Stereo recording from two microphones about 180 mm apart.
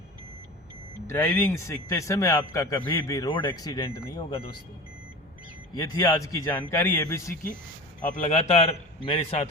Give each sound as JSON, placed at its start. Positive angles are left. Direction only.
{"t": 1.0, "sound": "speech", "side_deg": 15}
{"t": 5.7, "sound": "speech", "side_deg": 20}
{"t": 8.0, "sound": "a man's voice", "side_deg": 45}